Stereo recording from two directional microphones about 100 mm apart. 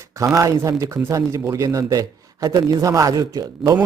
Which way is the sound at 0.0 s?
30° right (ahead or behind).